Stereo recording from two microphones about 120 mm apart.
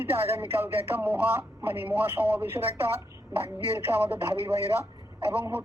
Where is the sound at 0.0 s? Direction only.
20° right (ahead or behind).